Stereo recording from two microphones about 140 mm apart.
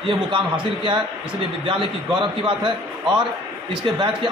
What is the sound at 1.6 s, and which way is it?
Speech, 35° right (ahead or behind).